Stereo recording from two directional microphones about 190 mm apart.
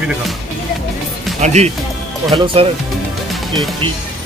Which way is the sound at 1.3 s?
35° right (ahead or behind).